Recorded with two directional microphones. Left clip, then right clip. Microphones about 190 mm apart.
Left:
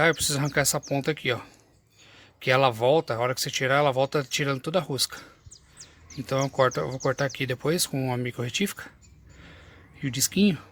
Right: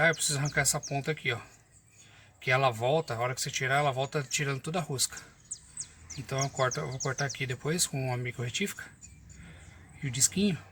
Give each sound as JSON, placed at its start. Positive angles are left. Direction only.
{"t": 0.0, "sound": "speech", "side_deg": 50}
{"t": 6.6, "sound": "speech", "side_deg": 50}
{"t": 10.0, "sound": "speech", "side_deg": 55}